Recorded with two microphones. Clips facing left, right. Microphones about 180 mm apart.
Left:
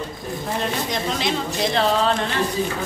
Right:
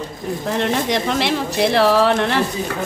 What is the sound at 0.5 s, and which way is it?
Speech, 85° right.